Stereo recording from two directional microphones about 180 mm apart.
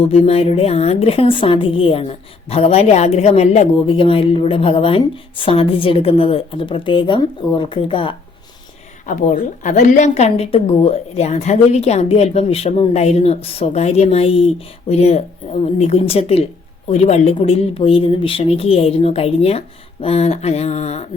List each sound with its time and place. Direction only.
0.0 s a woman's voice: 35° left (ahead or behind)
9.0 s a woman's voice: 45° left (ahead or behind)